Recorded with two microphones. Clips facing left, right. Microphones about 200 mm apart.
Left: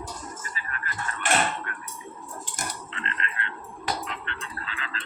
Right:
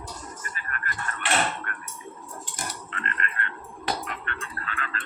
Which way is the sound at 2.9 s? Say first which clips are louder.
Right 1 dB; 55° right (ahead or behind).